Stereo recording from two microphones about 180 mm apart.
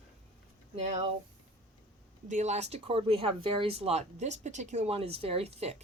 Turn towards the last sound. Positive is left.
turn(degrees=-35)  # may be behind; listen again after turning